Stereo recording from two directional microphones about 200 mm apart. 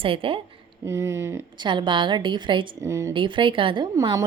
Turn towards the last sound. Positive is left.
turn(degrees=-20)  # may be behind; listen again after turning